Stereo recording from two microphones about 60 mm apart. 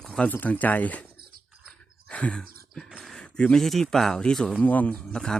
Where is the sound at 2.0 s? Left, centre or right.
Centre.